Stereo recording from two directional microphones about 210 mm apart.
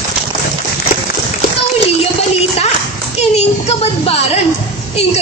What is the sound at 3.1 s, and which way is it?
A woman's voice, 30° left (ahead or behind).